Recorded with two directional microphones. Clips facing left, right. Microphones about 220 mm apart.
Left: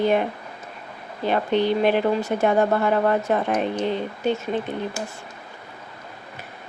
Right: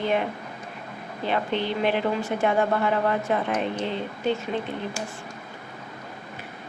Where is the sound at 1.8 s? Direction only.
45° left (ahead or behind).